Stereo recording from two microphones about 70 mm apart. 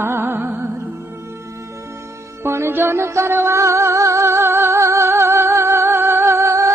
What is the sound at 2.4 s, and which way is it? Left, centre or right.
Music, right.